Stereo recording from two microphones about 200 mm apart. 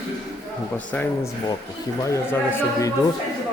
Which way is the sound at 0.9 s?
10° left (ahead or behind).